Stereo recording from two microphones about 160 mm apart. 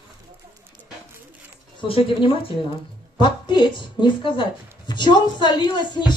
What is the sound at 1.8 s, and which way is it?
Speech, 35° left (ahead or behind).